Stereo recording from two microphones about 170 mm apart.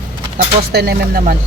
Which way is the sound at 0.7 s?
65° right (ahead or behind).